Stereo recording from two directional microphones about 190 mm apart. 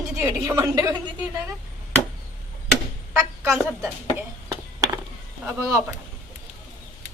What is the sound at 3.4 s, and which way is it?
Speech, centre (ahead or behind).